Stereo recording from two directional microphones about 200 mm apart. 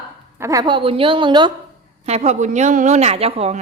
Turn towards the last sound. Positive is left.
turn(degrees=-30)  # may be behind; listen again after turning